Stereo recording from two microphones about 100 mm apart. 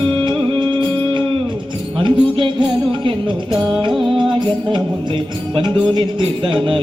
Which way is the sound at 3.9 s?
Centre (ahead or behind).